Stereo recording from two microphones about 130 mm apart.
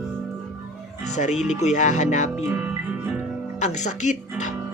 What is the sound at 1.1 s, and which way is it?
Speech, 65° left (ahead or behind).